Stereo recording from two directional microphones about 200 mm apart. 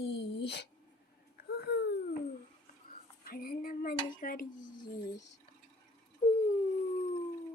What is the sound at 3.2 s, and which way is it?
Speech, 45° left (ahead or behind).